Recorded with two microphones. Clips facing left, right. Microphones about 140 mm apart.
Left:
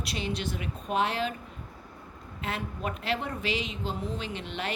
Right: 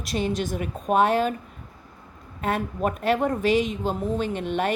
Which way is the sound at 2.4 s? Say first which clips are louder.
Right 9 dB; 45° right (ahead or behind).